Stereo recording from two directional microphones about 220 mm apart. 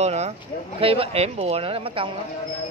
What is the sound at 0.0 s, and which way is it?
Speech, 30° right (ahead or behind).